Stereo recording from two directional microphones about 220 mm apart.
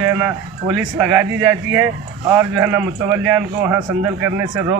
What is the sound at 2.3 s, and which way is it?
A man's voice, 10° right (ahead or behind).